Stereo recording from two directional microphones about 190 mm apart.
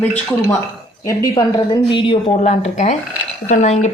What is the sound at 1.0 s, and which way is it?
Speech, 20° left (ahead or behind).